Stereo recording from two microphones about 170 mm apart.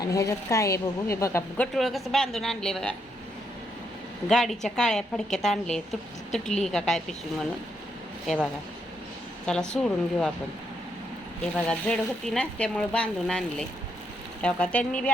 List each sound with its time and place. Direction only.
0.0 s a woman's voice: 20° left (ahead or behind); by 2.9 s 5° left (ahead or behind)
4.3 s a woman's voice: centre (ahead or behind)
9.5 s a woman's voice: 5° left (ahead or behind)
11.5 s a woman's voice: 5° left (ahead or behind)